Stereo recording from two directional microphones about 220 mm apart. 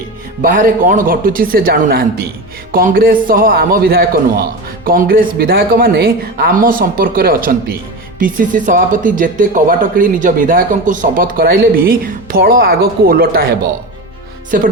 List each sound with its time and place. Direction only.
0.4 s speech: 35° right (ahead or behind)
14.5 s speech: 40° right (ahead or behind)